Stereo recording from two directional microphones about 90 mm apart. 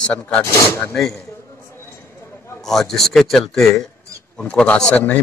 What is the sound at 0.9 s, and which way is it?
Speech, 5° left (ahead or behind).